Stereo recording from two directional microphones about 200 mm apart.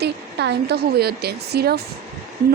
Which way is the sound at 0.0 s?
55° right (ahead or behind).